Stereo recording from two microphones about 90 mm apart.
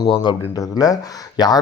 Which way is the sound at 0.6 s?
40° left (ahead or behind).